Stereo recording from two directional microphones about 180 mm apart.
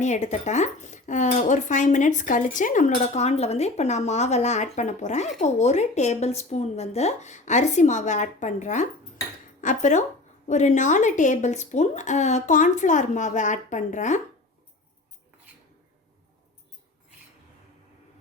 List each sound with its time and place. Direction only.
0.0 s speech: 40° left (ahead or behind)